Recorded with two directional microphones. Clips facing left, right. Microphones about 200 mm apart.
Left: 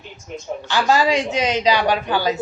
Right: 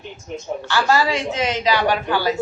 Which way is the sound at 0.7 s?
15° left (ahead or behind).